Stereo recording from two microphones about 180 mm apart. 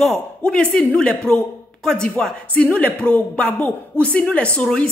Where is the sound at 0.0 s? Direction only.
5° left (ahead or behind).